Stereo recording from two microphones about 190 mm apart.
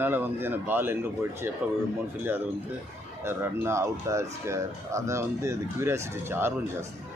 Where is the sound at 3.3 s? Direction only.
15° right (ahead or behind).